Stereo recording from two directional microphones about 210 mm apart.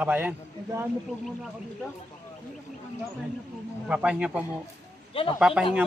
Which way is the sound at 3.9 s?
5° right (ahead or behind).